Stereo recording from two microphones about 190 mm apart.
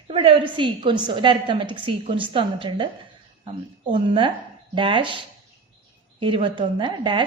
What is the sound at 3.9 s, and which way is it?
A woman's voice, 25° right (ahead or behind).